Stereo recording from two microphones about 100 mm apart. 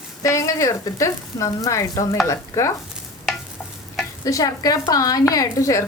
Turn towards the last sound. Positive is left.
turn(degrees=35)  # may be behind; listen again after turning